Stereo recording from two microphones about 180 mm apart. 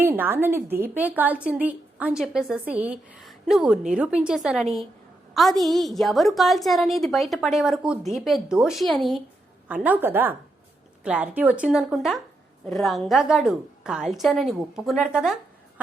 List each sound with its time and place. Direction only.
0.0 s a woman's voice: 10° right (ahead or behind)